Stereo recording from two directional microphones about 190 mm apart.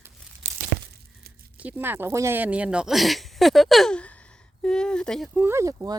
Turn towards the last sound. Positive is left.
turn(degrees=-15)  # may be behind; listen again after turning